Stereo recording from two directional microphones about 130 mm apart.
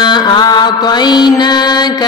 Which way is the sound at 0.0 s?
35° left (ahead or behind).